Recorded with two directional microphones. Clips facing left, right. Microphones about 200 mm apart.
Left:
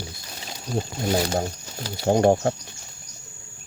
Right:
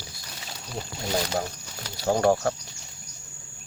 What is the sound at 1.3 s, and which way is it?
Speech, 30° left (ahead or behind).